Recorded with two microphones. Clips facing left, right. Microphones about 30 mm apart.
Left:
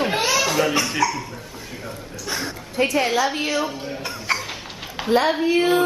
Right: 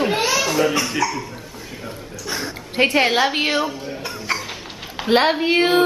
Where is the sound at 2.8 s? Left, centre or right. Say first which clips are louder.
Right 3 dB; right.